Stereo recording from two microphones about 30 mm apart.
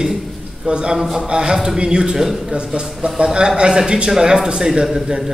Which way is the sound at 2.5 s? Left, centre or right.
Right.